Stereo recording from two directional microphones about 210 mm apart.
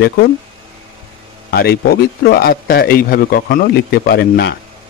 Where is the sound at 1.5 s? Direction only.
50° left (ahead or behind).